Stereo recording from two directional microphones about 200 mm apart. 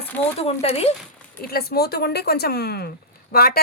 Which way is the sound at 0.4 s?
30° left (ahead or behind).